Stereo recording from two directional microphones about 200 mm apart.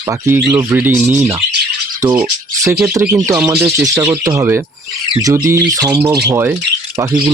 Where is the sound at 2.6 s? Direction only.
15° right (ahead or behind).